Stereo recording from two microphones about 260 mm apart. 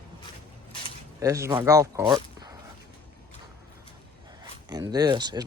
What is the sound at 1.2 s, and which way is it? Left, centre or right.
Speech, centre.